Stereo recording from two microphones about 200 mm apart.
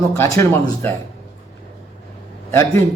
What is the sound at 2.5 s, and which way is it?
Speech, 10° left (ahead or behind).